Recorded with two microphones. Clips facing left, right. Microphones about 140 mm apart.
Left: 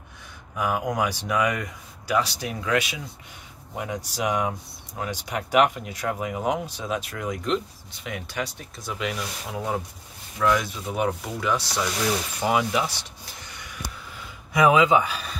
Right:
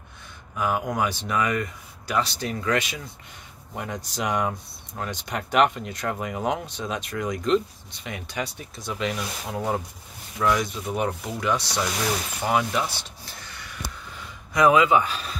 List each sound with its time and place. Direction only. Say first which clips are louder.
0.6 s speech: even; 10° left (ahead or behind)
12.4 s a sound: left 1 dB; 10° left (ahead or behind)
14.5 s speech: even; 15° left (ahead or behind)